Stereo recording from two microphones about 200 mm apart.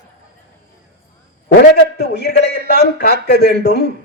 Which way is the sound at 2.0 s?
55° left (ahead or behind).